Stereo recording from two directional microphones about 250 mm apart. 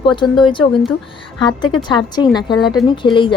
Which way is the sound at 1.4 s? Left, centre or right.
Centre.